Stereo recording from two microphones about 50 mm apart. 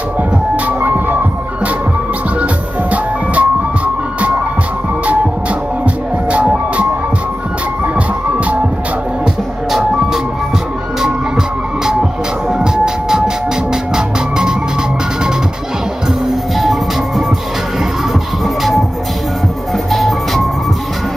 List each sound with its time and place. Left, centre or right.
0.7 s music: right
2.4 s music: right
7.8 s music: right
11.0 s music: centre
16.3 s music: centre
18.6 s music: centre
19.9 s music: centre